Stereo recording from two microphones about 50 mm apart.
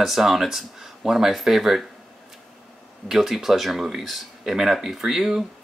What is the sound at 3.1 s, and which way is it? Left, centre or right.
Speech, centre.